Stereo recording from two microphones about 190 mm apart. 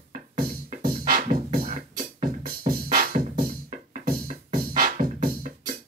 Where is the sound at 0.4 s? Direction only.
50° right (ahead or behind).